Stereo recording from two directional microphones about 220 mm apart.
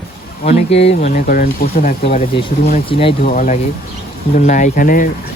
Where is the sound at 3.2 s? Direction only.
40° left (ahead or behind).